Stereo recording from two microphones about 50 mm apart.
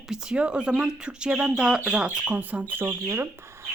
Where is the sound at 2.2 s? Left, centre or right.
Right.